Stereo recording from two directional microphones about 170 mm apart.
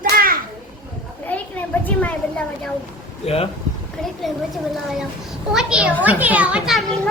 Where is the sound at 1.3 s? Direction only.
10° left (ahead or behind).